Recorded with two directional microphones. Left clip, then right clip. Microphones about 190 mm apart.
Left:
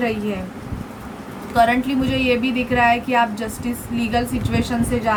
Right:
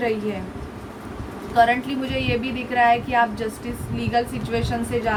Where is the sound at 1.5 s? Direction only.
25° left (ahead or behind).